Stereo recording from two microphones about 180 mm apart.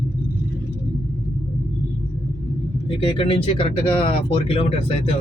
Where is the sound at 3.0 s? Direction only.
30° left (ahead or behind).